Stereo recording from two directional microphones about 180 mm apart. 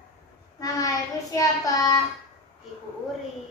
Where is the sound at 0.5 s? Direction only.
20° left (ahead or behind).